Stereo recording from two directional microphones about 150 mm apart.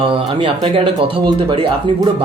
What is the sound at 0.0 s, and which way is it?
Speech, 35° right (ahead or behind).